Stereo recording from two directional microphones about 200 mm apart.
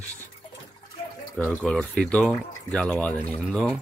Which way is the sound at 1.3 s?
5° left (ahead or behind).